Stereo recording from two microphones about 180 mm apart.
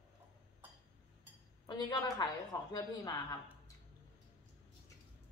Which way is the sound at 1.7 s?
20° left (ahead or behind).